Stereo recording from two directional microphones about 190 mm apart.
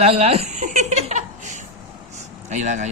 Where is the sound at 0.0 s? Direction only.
30° right (ahead or behind).